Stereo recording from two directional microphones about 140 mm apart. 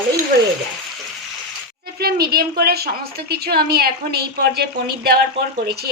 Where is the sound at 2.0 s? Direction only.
90° right.